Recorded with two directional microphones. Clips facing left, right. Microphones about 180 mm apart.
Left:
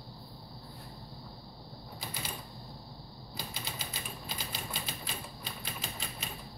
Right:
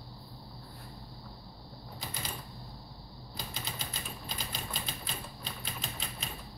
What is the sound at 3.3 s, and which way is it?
Typewriter, 5° left (ahead or behind).